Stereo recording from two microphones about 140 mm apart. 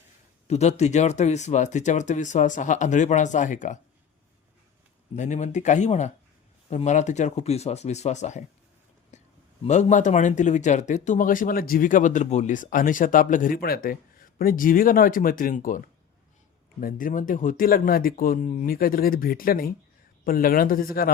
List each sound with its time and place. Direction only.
0.4 s speech: 50° left (ahead or behind)
5.1 s speech: 60° left (ahead or behind)
9.1 s a sound: 55° left (ahead or behind)
9.6 s speech: 60° left (ahead or behind); by 15.8 s 75° left (ahead or behind)
16.8 s speech: 75° left (ahead or behind)